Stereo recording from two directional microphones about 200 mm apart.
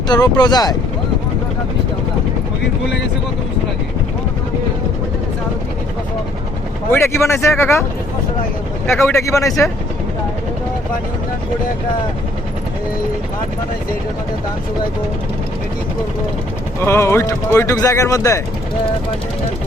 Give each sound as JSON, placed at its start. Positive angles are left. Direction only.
{"t": 0.1, "sound": "speech", "side_deg": 20}
{"t": 6.9, "sound": "speech", "side_deg": 10}
{"t": 9.0, "sound": "speech", "side_deg": 15}
{"t": 16.8, "sound": "speech", "side_deg": 10}